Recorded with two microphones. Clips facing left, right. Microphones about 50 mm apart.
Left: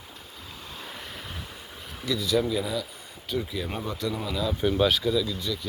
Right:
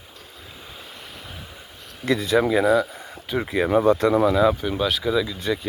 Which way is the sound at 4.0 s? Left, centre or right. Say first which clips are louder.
Right 12 dB; right.